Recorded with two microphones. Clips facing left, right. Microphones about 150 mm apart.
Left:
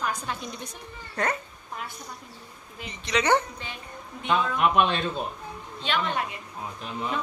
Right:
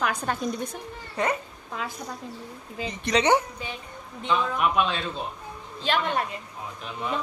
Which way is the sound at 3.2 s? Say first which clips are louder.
Right 1 dB; 15° right (ahead or behind).